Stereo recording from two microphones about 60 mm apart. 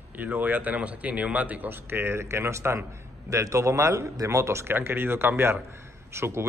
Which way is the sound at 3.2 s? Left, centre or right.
Right.